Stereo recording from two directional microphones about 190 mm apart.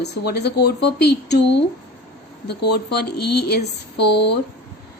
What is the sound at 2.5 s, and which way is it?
A woman's voice, 60° left (ahead or behind).